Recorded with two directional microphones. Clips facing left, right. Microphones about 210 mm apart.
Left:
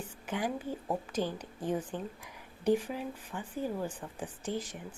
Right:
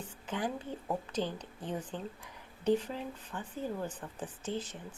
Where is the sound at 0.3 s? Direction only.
10° left (ahead or behind).